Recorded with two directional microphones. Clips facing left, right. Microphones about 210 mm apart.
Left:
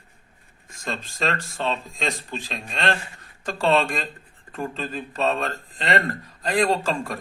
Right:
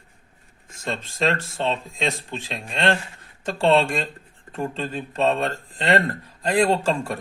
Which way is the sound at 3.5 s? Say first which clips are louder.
Right 2 dB; 25° right (ahead or behind).